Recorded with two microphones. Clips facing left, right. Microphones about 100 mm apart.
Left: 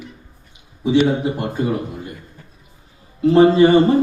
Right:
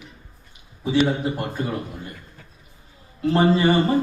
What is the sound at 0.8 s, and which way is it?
Speech, 15° left (ahead or behind).